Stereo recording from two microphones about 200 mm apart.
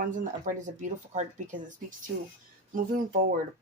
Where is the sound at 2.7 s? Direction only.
45° right (ahead or behind).